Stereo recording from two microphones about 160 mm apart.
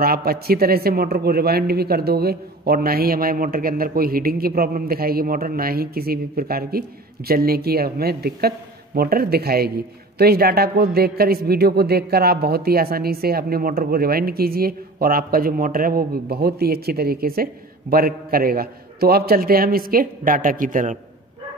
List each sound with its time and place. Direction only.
0.0 s a man's voice: 70° right (ahead or behind); by 21.0 s 55° right (ahead or behind)